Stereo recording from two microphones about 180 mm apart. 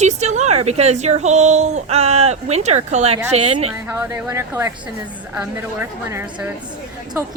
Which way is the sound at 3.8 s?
10° right (ahead or behind).